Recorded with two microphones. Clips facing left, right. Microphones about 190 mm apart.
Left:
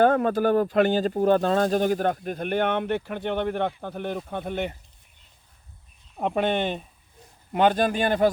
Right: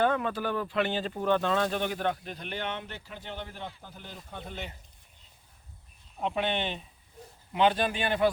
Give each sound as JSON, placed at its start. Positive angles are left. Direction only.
{"t": 0.0, "sound": "speech", "side_deg": 45}
{"t": 6.1, "sound": "speech", "side_deg": 50}